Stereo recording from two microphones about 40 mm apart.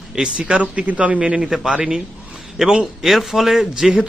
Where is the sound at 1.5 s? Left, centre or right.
Centre.